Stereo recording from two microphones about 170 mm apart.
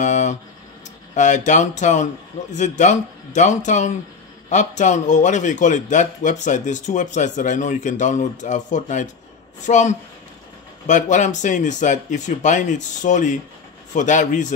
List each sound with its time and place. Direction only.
0.0 s a man's voice: 45° left (ahead or behind)